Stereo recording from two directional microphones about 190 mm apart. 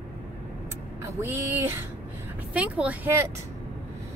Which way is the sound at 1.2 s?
10° right (ahead or behind).